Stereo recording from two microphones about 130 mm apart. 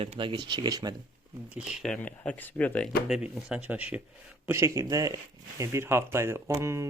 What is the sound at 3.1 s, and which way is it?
Speech, 5° right (ahead or behind).